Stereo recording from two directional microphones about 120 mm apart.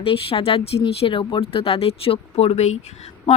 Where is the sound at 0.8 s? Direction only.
45° left (ahead or behind).